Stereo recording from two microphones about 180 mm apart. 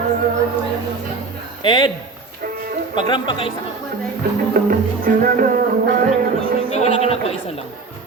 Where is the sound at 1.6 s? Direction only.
25° left (ahead or behind).